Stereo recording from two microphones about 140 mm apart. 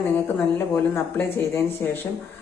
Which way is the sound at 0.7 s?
15° left (ahead or behind).